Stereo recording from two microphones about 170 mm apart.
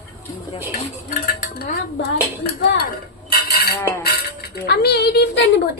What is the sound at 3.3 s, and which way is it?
Cutlery, 65° left (ahead or behind).